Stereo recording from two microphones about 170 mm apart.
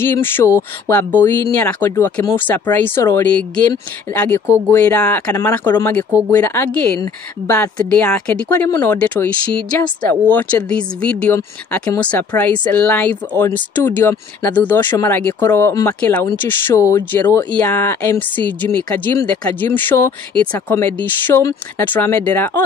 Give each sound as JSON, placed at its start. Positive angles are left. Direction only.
{"t": 0.0, "sound": "speech", "side_deg": 15}